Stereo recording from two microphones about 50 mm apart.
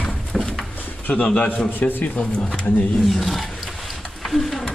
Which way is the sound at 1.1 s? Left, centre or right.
Left.